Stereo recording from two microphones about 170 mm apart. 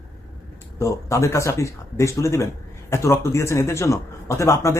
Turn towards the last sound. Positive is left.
turn(degrees=15)  # may be behind; listen again after turning